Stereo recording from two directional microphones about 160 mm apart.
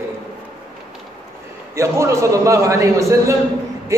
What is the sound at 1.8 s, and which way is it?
A man's voice, 15° right (ahead or behind).